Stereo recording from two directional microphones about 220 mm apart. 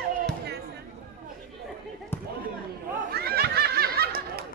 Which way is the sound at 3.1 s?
45° right (ahead or behind).